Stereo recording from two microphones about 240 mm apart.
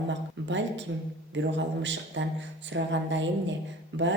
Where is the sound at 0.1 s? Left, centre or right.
Right.